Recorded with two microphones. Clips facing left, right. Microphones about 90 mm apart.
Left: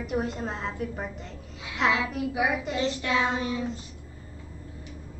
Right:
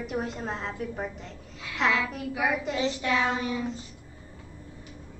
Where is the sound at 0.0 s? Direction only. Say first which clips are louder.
Left 2 dB; centre (ahead or behind).